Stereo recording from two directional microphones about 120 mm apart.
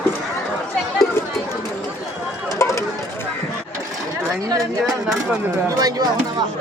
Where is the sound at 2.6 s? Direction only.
25° left (ahead or behind).